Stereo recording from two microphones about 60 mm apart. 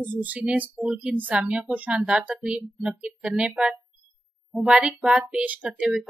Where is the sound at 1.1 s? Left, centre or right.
Right.